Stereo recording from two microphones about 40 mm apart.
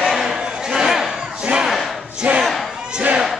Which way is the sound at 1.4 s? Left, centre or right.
Right.